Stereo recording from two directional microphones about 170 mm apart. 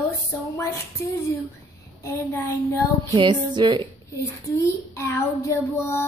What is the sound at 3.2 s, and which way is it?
Music, 25° right (ahead or behind).